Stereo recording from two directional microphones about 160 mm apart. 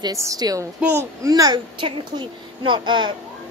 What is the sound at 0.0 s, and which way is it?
A child's voice, 20° right (ahead or behind).